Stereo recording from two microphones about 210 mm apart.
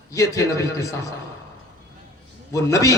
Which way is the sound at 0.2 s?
15° left (ahead or behind).